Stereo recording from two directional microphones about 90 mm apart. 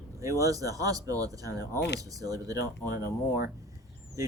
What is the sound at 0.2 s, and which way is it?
Speech, 35° right (ahead or behind).